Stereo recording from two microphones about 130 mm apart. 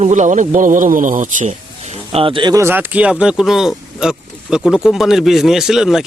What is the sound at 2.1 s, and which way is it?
Speech, 40° right (ahead or behind).